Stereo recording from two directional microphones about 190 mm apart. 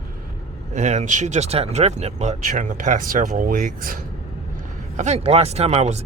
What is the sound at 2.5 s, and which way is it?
Speech, 45° right (ahead or behind).